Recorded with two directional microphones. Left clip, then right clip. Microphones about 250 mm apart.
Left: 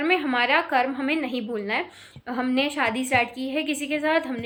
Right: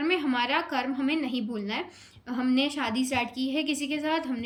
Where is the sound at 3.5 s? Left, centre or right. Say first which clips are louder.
Left 3 dB; centre.